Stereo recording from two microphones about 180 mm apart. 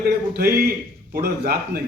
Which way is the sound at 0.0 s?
60° right (ahead or behind).